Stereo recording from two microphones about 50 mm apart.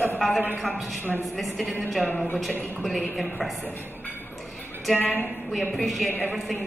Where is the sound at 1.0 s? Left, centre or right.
Left.